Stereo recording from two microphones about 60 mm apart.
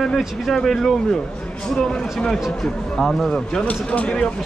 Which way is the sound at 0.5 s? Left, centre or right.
Centre.